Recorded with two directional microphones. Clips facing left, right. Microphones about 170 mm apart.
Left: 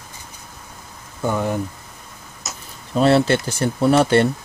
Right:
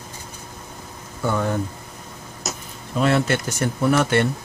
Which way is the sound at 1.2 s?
15° left (ahead or behind).